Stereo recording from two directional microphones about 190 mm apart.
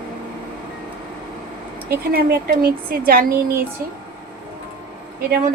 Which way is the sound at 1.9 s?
50° right (ahead or behind).